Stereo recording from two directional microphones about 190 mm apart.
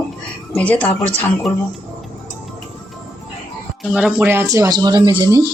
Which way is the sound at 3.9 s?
5° right (ahead or behind).